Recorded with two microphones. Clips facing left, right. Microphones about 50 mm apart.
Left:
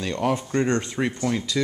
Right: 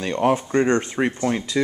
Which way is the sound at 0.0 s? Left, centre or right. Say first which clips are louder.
Right 4 dB; right.